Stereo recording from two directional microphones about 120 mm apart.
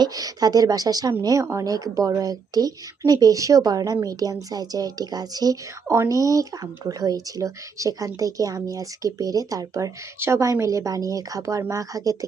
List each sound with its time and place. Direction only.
0.0 s a woman's voice: 30° right (ahead or behind)